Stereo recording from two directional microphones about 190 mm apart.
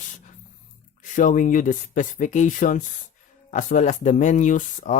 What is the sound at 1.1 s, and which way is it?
Speech, 40° left (ahead or behind).